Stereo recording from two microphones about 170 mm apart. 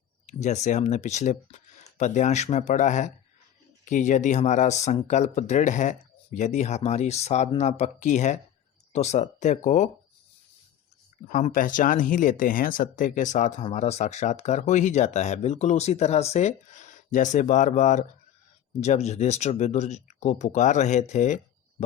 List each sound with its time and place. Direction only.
0.3 s speech: 45° left (ahead or behind)
11.3 s speech: 45° left (ahead or behind)